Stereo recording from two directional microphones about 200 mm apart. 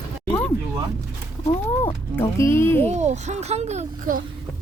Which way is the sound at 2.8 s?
35° right (ahead or behind).